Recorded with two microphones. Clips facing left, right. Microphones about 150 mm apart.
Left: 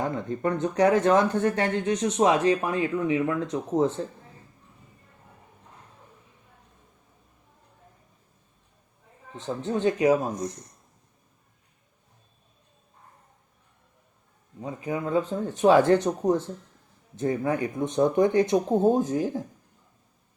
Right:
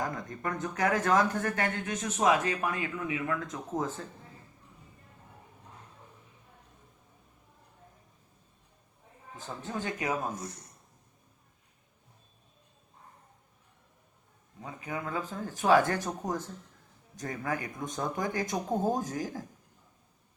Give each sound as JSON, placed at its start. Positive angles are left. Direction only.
{"t": 0.0, "sound": "speech", "side_deg": 30}
{"t": 9.7, "sound": "speech", "side_deg": 30}
{"t": 10.3, "sound": "speech", "side_deg": 15}
{"t": 14.6, "sound": "speech", "side_deg": 30}
{"t": 17.2, "sound": "speech", "side_deg": 25}